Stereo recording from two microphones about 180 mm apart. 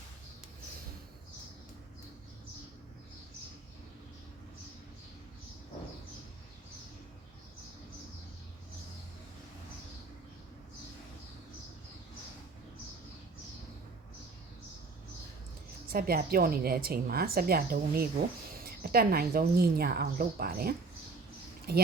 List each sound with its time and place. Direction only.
15.9 s a woman's voice: 55° right (ahead or behind)